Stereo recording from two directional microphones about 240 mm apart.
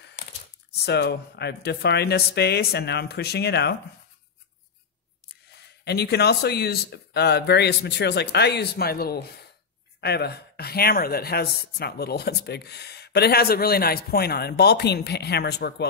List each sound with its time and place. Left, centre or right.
0.8 s speech: left
5.9 s speech: left